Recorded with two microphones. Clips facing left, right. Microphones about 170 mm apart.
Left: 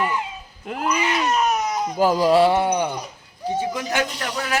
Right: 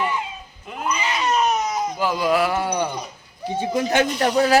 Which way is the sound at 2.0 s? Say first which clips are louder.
Left 5 dB; 40° left (ahead or behind).